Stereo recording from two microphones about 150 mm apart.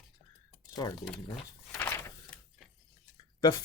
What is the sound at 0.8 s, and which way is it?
Speech, 25° left (ahead or behind).